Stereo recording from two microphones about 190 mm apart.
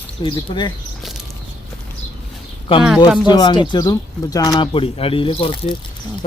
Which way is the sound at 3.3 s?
25° left (ahead or behind).